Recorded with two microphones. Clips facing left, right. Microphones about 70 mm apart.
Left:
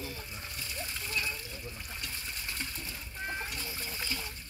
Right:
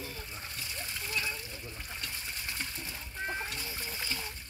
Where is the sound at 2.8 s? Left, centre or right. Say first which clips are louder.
Right 1 dB; right.